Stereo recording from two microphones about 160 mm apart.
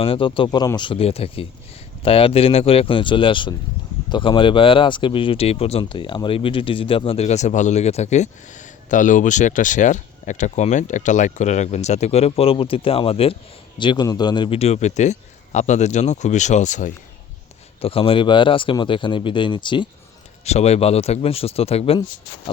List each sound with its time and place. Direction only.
0.0 s speech: 35° left (ahead or behind); by 16.9 s 50° left (ahead or behind)
17.7 s speech: 35° left (ahead or behind)
20.4 s speech: 45° left (ahead or behind)